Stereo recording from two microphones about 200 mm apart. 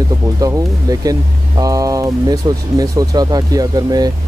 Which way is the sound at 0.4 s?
15° right (ahead or behind).